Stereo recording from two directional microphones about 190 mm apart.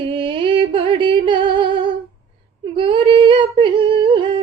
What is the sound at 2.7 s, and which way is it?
Humming, 25° right (ahead or behind).